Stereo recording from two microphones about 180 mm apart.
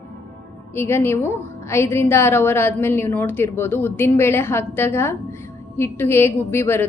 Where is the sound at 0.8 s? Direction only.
15° left (ahead or behind).